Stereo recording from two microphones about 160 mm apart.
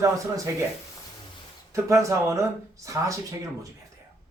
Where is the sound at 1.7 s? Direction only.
20° right (ahead or behind).